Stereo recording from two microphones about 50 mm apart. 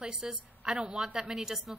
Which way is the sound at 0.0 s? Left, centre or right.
Centre.